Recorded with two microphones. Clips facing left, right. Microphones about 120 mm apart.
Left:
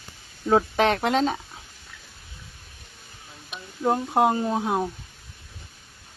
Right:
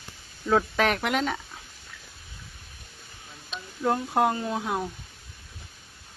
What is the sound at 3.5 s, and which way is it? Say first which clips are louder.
Speech: left 2 dB; 15° left (ahead or behind).